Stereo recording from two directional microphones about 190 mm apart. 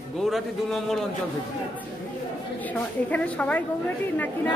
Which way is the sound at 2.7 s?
10° left (ahead or behind).